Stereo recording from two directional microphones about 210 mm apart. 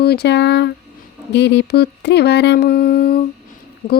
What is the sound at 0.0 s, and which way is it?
Speech, 50° left (ahead or behind).